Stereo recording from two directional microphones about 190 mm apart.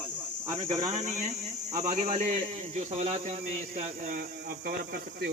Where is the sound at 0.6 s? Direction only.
35° right (ahead or behind).